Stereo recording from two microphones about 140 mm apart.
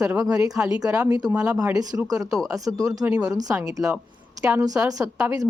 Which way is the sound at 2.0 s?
25° right (ahead or behind).